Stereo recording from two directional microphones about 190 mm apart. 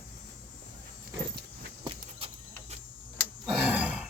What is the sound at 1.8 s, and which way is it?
Vehicle, 30° right (ahead or behind).